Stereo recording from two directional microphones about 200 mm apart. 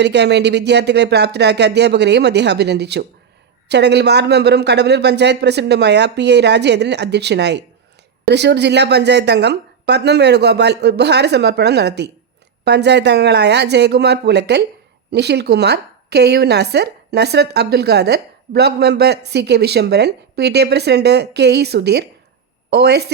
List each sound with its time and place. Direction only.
0.0 s a woman's voice: 60° right (ahead or behind)